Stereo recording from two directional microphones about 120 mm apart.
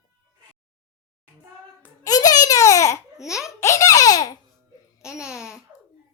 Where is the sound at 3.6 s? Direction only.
25° left (ahead or behind).